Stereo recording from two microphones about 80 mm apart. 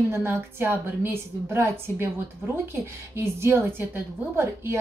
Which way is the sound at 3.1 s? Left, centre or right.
Right.